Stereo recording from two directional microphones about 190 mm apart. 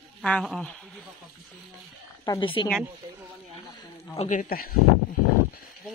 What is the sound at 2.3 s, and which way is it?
Speech, 25° left (ahead or behind).